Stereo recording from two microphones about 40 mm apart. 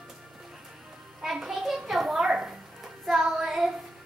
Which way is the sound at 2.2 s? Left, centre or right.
Centre.